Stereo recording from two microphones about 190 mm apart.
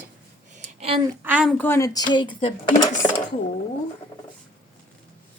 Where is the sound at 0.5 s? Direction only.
30° right (ahead or behind).